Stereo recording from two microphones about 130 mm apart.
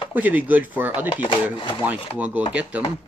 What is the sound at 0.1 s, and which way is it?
Speech, 10° right (ahead or behind).